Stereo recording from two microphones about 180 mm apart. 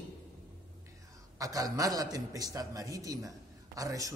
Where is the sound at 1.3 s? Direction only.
20° right (ahead or behind).